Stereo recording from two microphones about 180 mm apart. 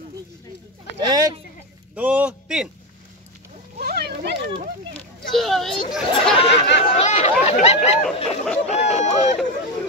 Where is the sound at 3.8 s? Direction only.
60° right (ahead or behind).